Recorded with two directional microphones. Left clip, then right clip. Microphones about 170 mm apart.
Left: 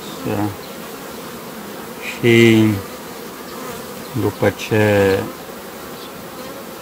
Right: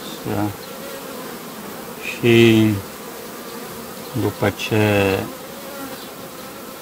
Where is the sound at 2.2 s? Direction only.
20° right (ahead or behind).